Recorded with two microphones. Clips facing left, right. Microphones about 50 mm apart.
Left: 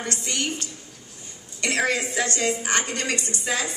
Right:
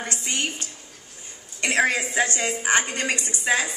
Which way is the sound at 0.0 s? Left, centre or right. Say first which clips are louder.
Even; right.